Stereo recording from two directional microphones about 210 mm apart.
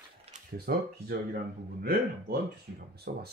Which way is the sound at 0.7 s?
45° right (ahead or behind).